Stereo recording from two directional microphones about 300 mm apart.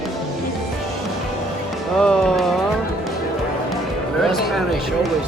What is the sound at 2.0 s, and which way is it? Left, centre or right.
Music, centre.